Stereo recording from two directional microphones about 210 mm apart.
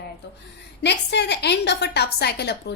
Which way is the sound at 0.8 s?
55° left (ahead or behind).